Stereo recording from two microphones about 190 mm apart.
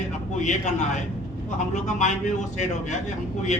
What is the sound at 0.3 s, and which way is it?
Speech, 40° left (ahead or behind).